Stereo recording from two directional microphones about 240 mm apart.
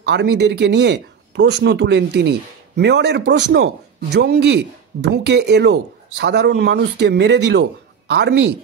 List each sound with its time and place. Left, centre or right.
0.0 s speech: right